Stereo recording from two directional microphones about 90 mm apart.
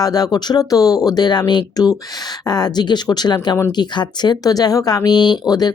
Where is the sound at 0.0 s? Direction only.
45° left (ahead or behind).